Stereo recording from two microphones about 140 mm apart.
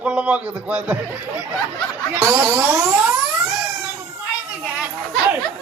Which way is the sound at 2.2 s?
20° right (ahead or behind).